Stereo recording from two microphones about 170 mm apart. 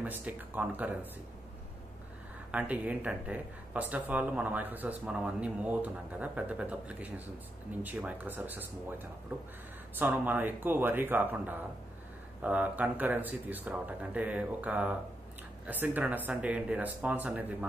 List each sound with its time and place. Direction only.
0.0 s speech: 10° right (ahead or behind)
2.5 s speech: 10° right (ahead or behind)